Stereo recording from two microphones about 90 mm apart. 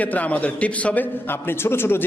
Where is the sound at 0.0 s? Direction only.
15° left (ahead or behind).